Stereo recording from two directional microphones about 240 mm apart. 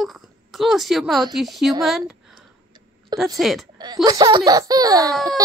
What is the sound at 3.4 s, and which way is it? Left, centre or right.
Speech, centre.